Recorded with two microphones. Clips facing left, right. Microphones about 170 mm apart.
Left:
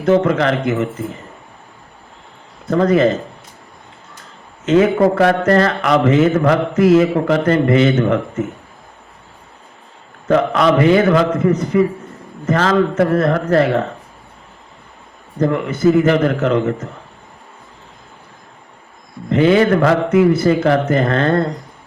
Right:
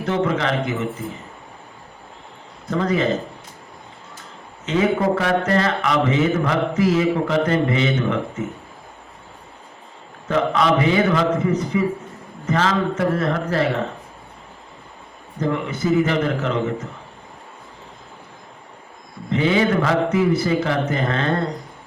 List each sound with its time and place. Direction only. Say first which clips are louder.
0.1 s a man's voice: left 7 dB; 50° left (ahead or behind)
2.6 s a man's voice: left 7 dB; 50° left (ahead or behind)
4.6 s a man's voice: left 7 dB; 55° left (ahead or behind)
10.2 s a man's voice: left 5 dB; 50° left (ahead or behind)
15.4 s a man's voice: left 6 dB; 50° left (ahead or behind)
19.3 s a man's voice: left 6 dB; 60° left (ahead or behind)